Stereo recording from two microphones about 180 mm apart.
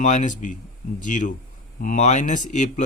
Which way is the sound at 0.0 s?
40° left (ahead or behind).